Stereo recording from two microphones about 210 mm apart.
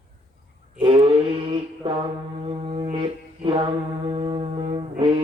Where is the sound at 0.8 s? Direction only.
25° right (ahead or behind).